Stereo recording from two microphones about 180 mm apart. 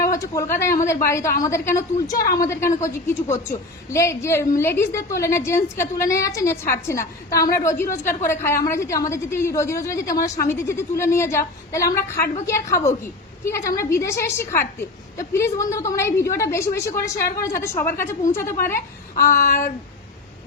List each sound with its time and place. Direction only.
0.0 s a woman's voice: 15° left (ahead or behind)
19.5 s speech: 50° left (ahead or behind)